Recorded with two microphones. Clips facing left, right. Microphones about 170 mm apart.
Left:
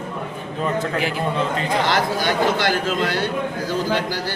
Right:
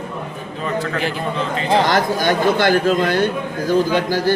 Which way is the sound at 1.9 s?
45° right (ahead or behind).